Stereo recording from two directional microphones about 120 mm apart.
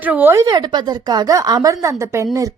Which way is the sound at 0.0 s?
15° right (ahead or behind).